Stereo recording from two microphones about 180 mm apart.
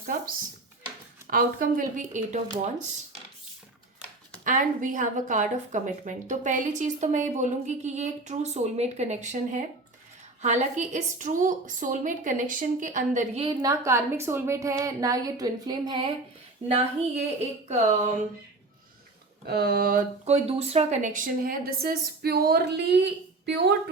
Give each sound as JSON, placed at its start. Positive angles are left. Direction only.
{"t": 1.3, "sound": "a woman's voice", "side_deg": -50}
{"t": 4.4, "sound": "a woman's voice", "side_deg": -45}
{"t": 13.4, "sound": "a woman's voice", "side_deg": -20}
{"t": 17.2, "sound": "speech", "side_deg": -40}
{"t": 19.5, "sound": "a woman's voice", "side_deg": -60}
{"t": 20.2, "sound": "a woman's voice", "side_deg": -35}